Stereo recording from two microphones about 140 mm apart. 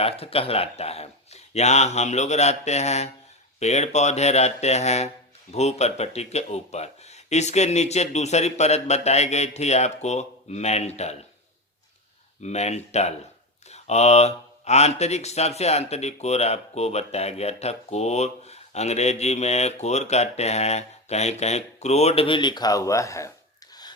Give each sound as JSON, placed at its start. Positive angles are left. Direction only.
{"t": 0.0, "sound": "speech", "side_deg": 45}
{"t": 12.4, "sound": "speech", "side_deg": 50}